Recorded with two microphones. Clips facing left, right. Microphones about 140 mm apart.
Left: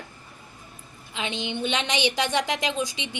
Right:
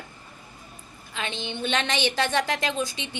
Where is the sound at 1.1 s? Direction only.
15° left (ahead or behind).